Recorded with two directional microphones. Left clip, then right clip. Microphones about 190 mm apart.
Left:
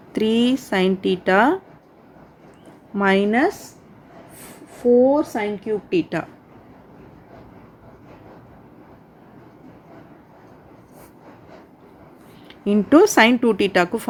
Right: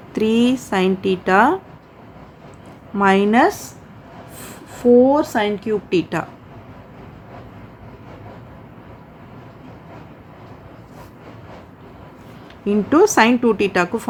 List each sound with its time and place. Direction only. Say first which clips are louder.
0.1 s a woman's voice: right 2 dB; 15° left (ahead or behind)
3.0 s a woman's voice: right 3 dB; 15° left (ahead or behind)
3.2 s speech: right 4 dB; centre (ahead or behind)
4.8 s a woman's voice: right 3 dB; 10° right (ahead or behind)
12.6 s a woman's voice: even; 25° left (ahead or behind)